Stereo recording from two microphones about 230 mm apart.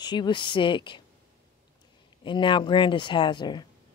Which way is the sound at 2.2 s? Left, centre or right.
Left.